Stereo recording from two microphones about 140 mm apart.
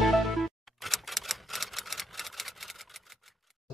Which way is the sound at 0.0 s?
Centre (ahead or behind).